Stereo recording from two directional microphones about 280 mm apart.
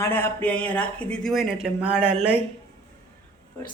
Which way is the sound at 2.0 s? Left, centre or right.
Right.